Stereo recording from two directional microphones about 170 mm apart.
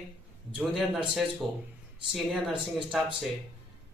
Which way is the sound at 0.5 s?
5° right (ahead or behind).